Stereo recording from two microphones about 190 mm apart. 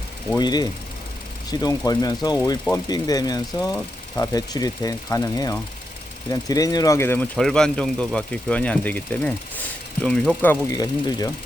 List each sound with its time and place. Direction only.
0.3 s speech: 20° left (ahead or behind)
10.7 s speech: 20° left (ahead or behind)